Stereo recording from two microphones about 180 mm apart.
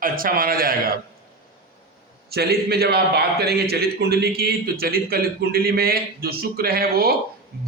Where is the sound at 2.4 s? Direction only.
60° right (ahead or behind).